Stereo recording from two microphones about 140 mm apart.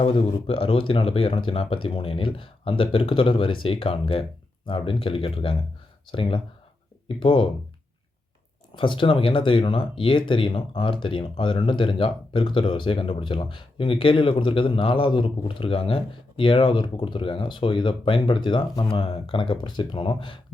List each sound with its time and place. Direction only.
0.0 s speech: 40° left (ahead or behind)
8.7 s speech: 35° left (ahead or behind)